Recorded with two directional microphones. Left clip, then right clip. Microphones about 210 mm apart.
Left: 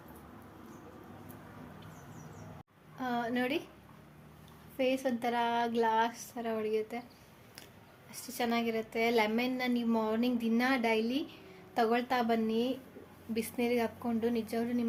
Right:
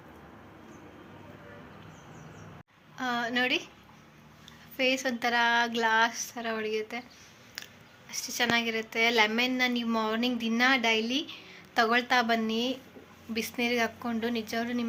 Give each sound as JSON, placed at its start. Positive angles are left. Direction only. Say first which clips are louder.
{"t": 3.0, "sound": "a woman's voice", "louder": "right 5 dB", "side_deg": 15}
{"t": 4.8, "sound": "a woman's voice", "louder": "right 4 dB", "side_deg": 10}
{"t": 8.1, "sound": "a woman's voice", "louder": "right 6 dB", "side_deg": 10}